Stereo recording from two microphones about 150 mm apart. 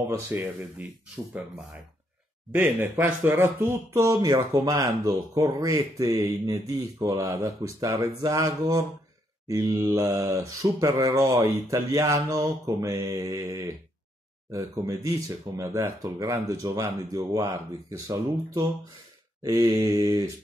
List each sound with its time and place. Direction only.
0.3 s speech: 15° right (ahead or behind)